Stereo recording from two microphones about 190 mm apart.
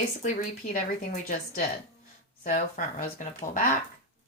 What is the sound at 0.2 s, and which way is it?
Speech, 45° left (ahead or behind).